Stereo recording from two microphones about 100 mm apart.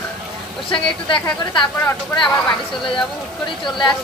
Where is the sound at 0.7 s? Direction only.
55° left (ahead or behind).